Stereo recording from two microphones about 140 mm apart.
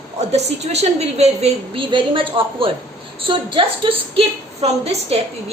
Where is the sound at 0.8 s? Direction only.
50° right (ahead or behind).